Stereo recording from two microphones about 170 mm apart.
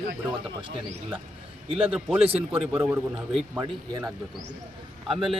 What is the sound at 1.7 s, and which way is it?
Speech, 30° right (ahead or behind).